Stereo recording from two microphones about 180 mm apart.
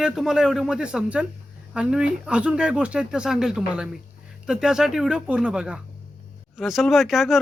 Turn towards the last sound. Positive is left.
turn(degrees=0)  # may be behind; listen again after turning